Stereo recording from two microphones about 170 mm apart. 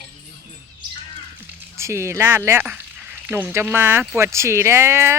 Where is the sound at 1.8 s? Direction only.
15° right (ahead or behind).